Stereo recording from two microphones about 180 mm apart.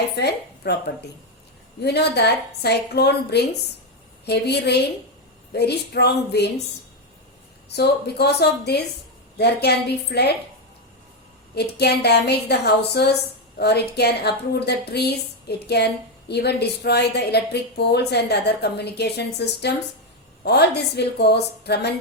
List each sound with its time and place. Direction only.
0.2 s a woman's voice: 65° left (ahead or behind)
1.8 s a woman's voice: 65° left (ahead or behind)
7.7 s a woman's voice: 65° left (ahead or behind)
11.5 s a woman's voice: 65° left (ahead or behind)